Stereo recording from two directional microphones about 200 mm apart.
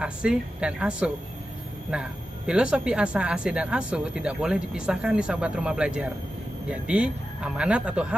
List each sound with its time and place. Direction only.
0.0 s speech: 5° right (ahead or behind)